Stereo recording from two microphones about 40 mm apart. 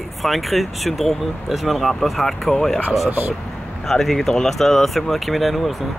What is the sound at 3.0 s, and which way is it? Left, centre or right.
Speech, right.